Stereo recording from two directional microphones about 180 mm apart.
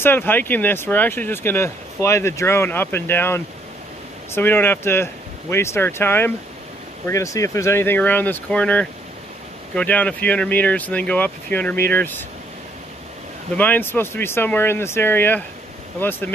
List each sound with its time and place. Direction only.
0.0 s speech: 10° left (ahead or behind)
13.6 s speech: 10° left (ahead or behind)